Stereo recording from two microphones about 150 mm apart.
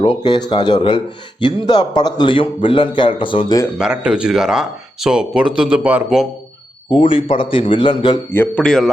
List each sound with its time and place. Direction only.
0.0 s speech: 40° left (ahead or behind)
3.8 s speech: 5° right (ahead or behind)
6.9 s speech: 35° left (ahead or behind)
8.3 s a man's voice: 10° left (ahead or behind)